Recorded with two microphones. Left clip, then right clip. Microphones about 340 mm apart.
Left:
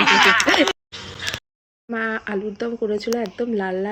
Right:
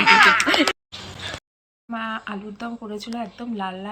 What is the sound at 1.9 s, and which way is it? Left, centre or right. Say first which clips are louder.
Speech: left 4 dB; centre.